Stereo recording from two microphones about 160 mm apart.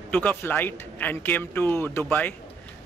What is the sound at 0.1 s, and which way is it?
A man's voice, 10° left (ahead or behind).